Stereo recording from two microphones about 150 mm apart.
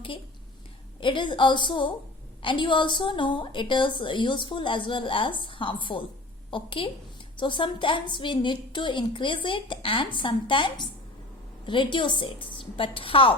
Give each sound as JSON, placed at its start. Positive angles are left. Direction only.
{"t": 1.0, "sound": "a woman's voice", "side_deg": 35}